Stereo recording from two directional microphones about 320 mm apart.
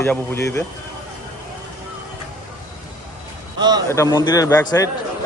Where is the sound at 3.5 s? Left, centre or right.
Centre.